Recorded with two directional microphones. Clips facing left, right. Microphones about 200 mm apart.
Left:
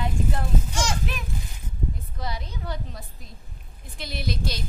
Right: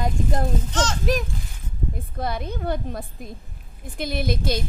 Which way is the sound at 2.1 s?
55° right (ahead or behind).